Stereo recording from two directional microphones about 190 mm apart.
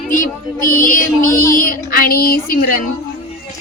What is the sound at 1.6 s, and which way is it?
A woman's voice, 50° left (ahead or behind).